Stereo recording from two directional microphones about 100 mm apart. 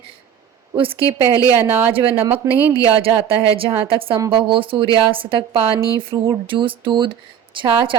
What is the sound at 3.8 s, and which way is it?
A woman's voice, 65° right (ahead or behind).